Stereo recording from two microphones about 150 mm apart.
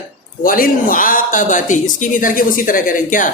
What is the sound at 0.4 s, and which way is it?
A woman's voice, 70° left (ahead or behind).